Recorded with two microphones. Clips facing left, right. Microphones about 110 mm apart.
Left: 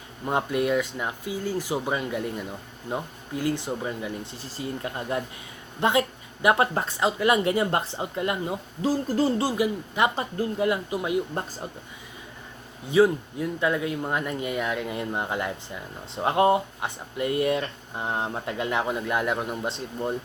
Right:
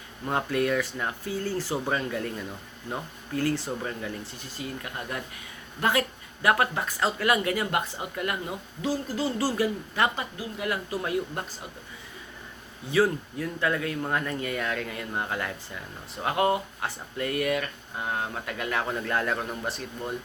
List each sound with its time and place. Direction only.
0.3 s speech: 20° left (ahead or behind)
8.8 s speech: 40° left (ahead or behind)
9.4 s speech: 15° left (ahead or behind)
12.9 s speech: 20° left (ahead or behind)